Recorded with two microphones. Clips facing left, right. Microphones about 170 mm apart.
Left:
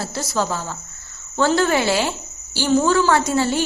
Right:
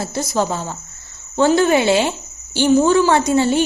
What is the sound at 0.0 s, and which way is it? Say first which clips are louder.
A woman's voice: right 3 dB; 20° right (ahead or behind).